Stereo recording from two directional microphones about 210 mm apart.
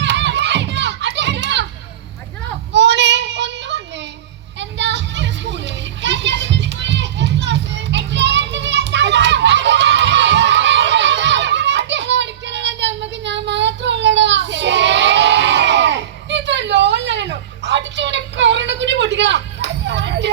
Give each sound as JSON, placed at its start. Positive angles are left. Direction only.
{"t": 0.0, "sound": "children playing", "side_deg": -55}
{"t": 2.7, "sound": "child singing", "side_deg": -55}
{"t": 4.6, "sound": "children playing", "side_deg": -55}